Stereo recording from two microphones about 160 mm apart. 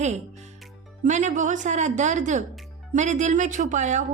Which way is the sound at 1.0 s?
50° right (ahead or behind).